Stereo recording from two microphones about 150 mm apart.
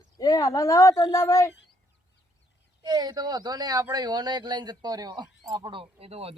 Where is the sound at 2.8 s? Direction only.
25° right (ahead or behind).